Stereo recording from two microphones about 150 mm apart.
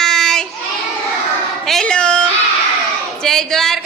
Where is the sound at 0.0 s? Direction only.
5° left (ahead or behind).